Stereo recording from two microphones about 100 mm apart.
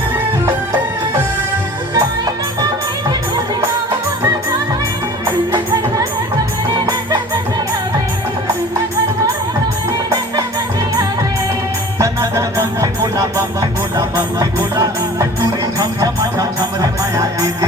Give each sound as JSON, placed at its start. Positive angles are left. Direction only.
{"t": 0.4, "sound": "music", "side_deg": -20}
{"t": 2.0, "sound": "music", "side_deg": -40}
{"t": 6.7, "sound": "music", "side_deg": -40}
{"t": 11.9, "sound": "music", "side_deg": -30}